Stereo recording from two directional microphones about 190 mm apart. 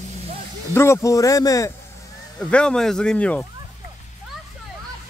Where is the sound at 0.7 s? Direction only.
15° left (ahead or behind).